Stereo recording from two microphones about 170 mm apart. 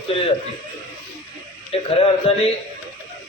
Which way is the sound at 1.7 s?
35° left (ahead or behind).